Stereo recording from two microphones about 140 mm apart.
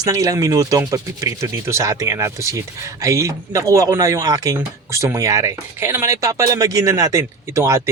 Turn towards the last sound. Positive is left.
turn(degrees=-20)  # may be behind; listen again after turning